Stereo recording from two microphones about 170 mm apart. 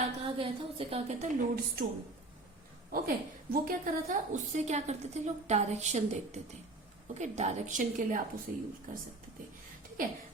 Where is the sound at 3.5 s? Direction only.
55° right (ahead or behind).